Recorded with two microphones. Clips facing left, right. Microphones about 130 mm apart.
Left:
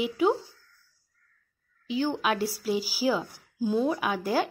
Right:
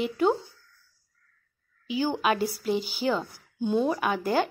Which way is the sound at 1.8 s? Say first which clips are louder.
Right 1 dB; centre (ahead or behind).